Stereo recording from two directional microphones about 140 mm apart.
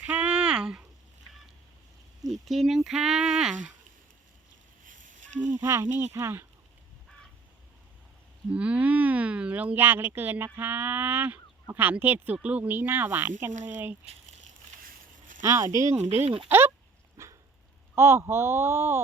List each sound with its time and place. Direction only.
0.0 s a sound: 10° right (ahead or behind)
2.5 s speech: centre (ahead or behind)
4.8 s a sound: 70° right (ahead or behind)
5.5 s speech: 20° right (ahead or behind)
8.5 s speech: 10° right (ahead or behind)
13.5 s speech: 65° right (ahead or behind)
15.4 s speech: 20° right (ahead or behind)
17.2 s dog: 20° right (ahead or behind)
17.9 s speech: 20° right (ahead or behind)